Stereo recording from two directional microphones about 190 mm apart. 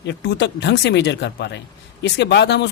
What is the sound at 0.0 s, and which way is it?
Speech, 60° left (ahead or behind).